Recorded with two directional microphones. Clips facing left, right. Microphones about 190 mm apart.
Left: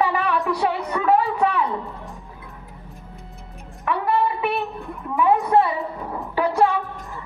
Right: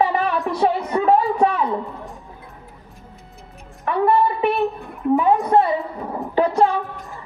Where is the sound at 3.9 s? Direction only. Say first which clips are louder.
Right 4 dB; 40° right (ahead or behind).